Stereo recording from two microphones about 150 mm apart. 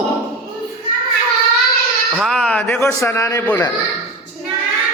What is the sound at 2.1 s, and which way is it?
Speech, centre (ahead or behind).